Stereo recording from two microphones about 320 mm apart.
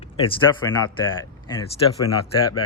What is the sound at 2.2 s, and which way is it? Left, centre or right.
Speech, left.